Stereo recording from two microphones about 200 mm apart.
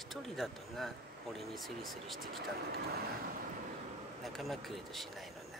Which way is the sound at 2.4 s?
50° right (ahead or behind).